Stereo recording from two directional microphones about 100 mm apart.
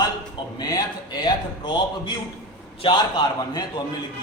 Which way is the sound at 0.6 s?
40° left (ahead or behind).